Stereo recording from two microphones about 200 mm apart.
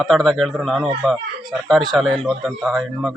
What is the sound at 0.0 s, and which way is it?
Speech, centre (ahead or behind).